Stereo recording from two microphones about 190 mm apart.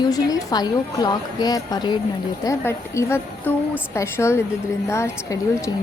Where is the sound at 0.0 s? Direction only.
20° left (ahead or behind).